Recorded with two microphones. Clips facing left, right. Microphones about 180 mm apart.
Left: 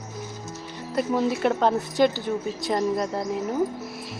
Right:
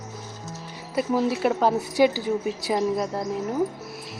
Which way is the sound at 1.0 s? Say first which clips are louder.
Even; 5° right (ahead or behind).